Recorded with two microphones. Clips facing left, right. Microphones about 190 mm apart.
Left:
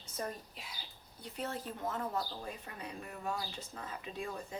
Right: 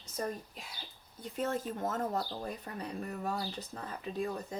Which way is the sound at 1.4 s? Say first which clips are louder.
Right 6 dB; 45° right (ahead or behind).